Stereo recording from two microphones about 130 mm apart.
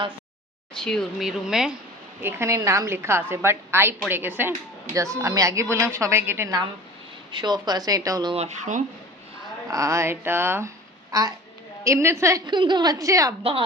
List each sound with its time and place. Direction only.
0.8 s speech: 5° left (ahead or behind)
2.2 s a woman's voice: 20° right (ahead or behind)
7.3 s speech: 35° right (ahead or behind)
8.3 s speech: 55° right (ahead or behind)
9.6 s a woman's voice: 25° right (ahead or behind)
12.5 s speech: 35° right (ahead or behind)
13.4 s speech: 45° right (ahead or behind)